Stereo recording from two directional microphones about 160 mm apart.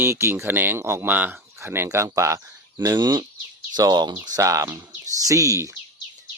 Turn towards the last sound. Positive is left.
turn(degrees=-20)  # may be behind; listen again after turning